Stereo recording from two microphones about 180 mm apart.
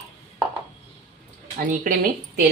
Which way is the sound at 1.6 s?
55° right (ahead or behind).